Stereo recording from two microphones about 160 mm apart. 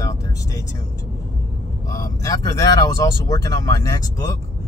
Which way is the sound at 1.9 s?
20° left (ahead or behind).